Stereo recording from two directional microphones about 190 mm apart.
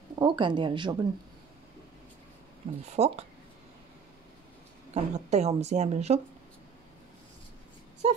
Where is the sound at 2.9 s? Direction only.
35° right (ahead or behind).